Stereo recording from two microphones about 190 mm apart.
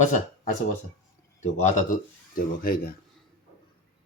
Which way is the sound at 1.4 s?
35° left (ahead or behind).